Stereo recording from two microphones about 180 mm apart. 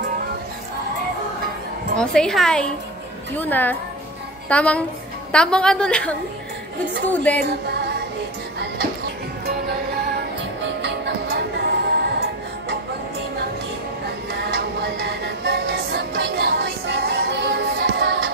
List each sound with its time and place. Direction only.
2.0 s a woman's voice: 5° left (ahead or behind)
7.4 s music: 65° right (ahead or behind)
10.8 s music: 70° right (ahead or behind)
14.0 s music: 65° right (ahead or behind)